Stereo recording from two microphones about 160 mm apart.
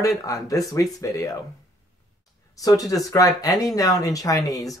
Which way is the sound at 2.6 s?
20° left (ahead or behind).